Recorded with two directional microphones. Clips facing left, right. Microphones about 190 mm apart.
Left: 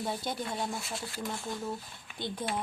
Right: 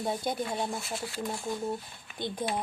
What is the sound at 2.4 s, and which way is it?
Speech, 15° right (ahead or behind).